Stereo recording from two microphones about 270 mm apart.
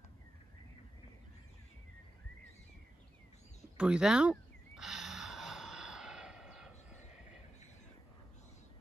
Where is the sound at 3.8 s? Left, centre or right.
Centre.